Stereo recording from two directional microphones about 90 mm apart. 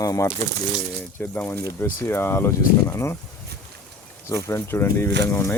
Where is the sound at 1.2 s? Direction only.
25° left (ahead or behind).